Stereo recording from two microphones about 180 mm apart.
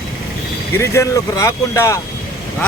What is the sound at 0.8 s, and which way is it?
Speech, 15° left (ahead or behind).